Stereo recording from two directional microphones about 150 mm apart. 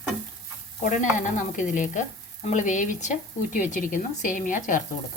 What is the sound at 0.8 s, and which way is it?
Speech, 60° left (ahead or behind).